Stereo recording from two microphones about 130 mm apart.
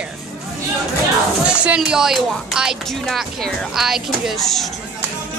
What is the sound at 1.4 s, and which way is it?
Music, 10° right (ahead or behind).